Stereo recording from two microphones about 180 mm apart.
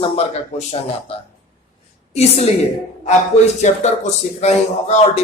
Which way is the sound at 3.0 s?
40° left (ahead or behind).